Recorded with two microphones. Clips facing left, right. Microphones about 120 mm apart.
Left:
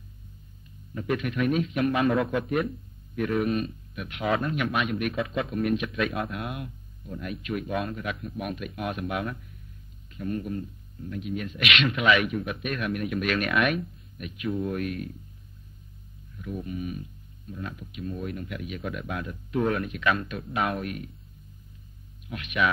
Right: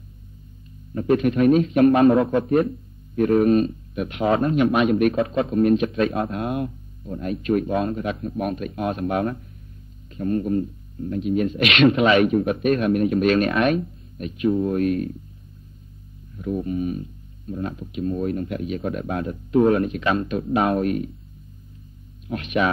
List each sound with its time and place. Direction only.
0.9 s speech: 35° right (ahead or behind)
16.3 s speech: 35° right (ahead or behind)
22.3 s speech: 35° right (ahead or behind)